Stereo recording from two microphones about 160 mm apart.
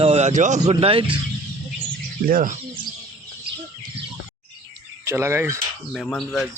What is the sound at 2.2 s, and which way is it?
Speech, 60° right (ahead or behind).